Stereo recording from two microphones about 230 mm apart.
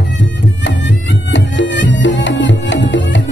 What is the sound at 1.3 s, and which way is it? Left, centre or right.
Music, left.